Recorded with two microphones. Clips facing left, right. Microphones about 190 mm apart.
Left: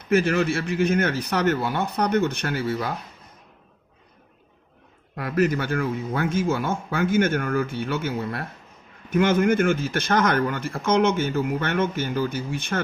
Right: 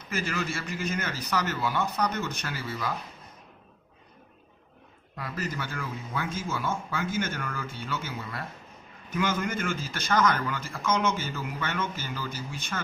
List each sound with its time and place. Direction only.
0.1 s speech: 60° left (ahead or behind)
5.1 s speech: 60° left (ahead or behind)